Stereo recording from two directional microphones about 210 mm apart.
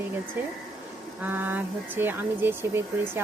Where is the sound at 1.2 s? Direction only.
10° right (ahead or behind).